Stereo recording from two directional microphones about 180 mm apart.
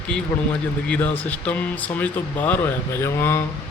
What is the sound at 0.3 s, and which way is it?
Speech, 15° left (ahead or behind).